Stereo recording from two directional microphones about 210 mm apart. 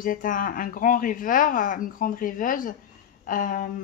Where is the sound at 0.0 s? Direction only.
40° left (ahead or behind).